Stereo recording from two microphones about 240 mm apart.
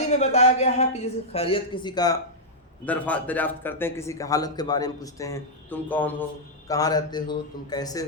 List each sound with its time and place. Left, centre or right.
0.1 s speech: left
2.8 s a man's voice: centre